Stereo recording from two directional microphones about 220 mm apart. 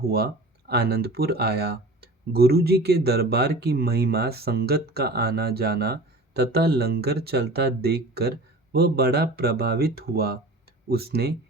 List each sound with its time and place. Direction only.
0.7 s speech: 45° right (ahead or behind)